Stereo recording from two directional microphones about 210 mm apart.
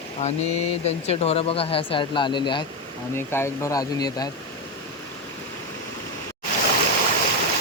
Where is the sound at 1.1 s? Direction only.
30° left (ahead or behind).